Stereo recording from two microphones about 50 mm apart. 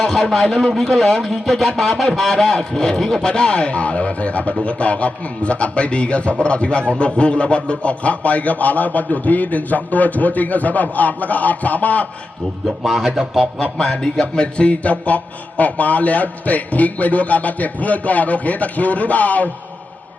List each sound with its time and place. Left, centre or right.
0.0 s a man's voice: centre; by 12.0 s left
12.6 s a man's voice: centre
13.6 s a man's voice: left
14.4 s a man's voice: left